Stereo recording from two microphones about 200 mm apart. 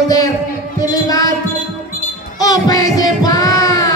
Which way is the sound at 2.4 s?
20° left (ahead or behind).